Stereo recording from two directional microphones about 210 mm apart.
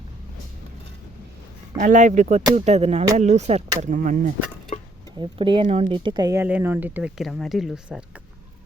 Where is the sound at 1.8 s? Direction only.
35° right (ahead or behind).